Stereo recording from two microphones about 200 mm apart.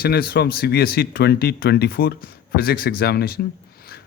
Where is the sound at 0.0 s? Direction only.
50° left (ahead or behind).